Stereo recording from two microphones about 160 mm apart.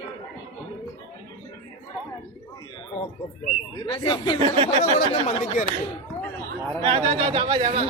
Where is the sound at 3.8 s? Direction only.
35° left (ahead or behind).